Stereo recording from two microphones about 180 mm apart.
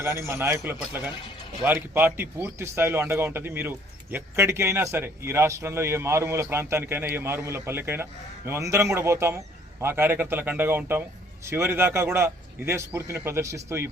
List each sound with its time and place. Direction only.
0.2 s a man's voice: 15° right (ahead or behind)
1.1 s music: 25° left (ahead or behind)
1.6 s a man's voice: 10° right (ahead or behind)